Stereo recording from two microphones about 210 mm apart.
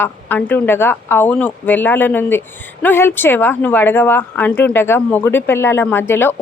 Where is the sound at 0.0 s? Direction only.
10° left (ahead or behind).